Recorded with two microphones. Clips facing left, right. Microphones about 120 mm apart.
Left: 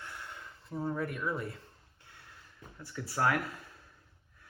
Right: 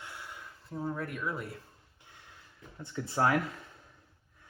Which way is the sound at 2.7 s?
25° right (ahead or behind).